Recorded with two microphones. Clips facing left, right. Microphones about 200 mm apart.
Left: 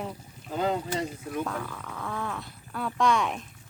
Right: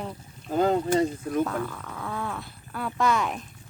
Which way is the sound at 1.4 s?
5° right (ahead or behind).